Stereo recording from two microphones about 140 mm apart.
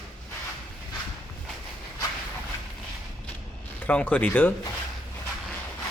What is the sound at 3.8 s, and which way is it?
Speech, 10° left (ahead or behind).